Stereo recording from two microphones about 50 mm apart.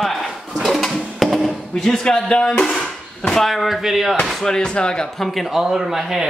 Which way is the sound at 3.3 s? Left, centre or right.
Centre.